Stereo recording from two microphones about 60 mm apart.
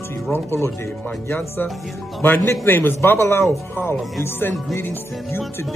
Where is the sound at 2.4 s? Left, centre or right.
Left.